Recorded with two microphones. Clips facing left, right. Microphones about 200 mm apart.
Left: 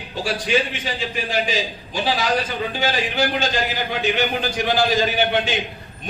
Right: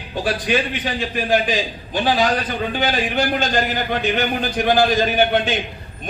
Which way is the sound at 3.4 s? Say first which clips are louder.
Right 2 dB; 50° right (ahead or behind).